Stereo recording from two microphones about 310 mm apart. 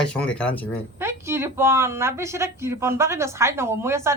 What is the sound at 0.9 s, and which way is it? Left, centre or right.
Speech, centre.